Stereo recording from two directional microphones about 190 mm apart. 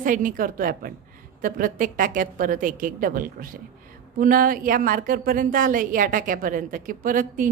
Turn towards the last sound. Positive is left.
turn(degrees=-45)  # may be behind; listen again after turning